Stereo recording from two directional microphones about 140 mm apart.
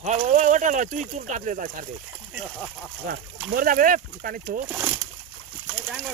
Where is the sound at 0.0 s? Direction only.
60° right (ahead or behind).